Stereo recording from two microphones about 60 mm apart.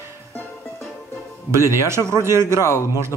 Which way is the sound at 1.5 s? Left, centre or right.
Right.